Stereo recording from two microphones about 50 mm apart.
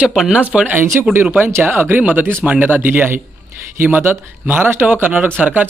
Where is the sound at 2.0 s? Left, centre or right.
Right.